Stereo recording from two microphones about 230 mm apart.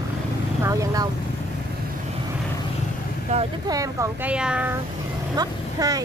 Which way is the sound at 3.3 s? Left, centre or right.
Right.